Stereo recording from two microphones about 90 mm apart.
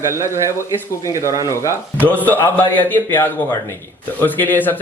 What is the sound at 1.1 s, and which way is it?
Speech, 40° right (ahead or behind).